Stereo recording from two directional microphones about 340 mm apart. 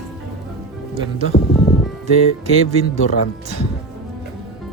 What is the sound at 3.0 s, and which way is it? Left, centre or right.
Speech, left.